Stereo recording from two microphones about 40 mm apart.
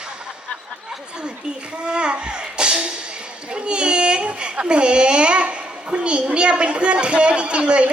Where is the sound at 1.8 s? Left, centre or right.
Right.